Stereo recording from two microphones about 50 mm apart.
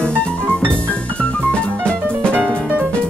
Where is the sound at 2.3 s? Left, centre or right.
Right.